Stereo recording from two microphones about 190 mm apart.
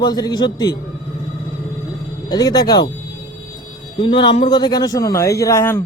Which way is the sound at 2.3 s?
20° left (ahead or behind).